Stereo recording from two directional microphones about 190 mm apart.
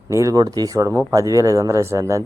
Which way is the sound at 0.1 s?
15° right (ahead or behind).